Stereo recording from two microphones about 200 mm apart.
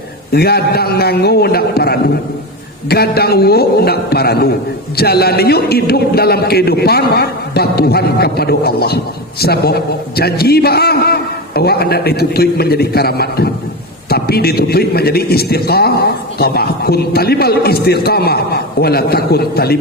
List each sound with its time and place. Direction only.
0.3 s a man's voice: 50° left (ahead or behind)